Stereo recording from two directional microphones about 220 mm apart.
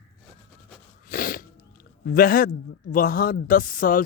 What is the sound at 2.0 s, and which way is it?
Speech, 40° left (ahead or behind).